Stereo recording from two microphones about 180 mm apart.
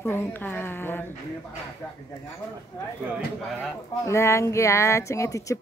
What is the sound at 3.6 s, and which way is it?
Speech, 15° left (ahead or behind).